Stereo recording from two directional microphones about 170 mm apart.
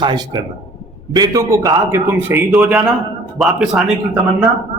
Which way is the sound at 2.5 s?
5° right (ahead or behind).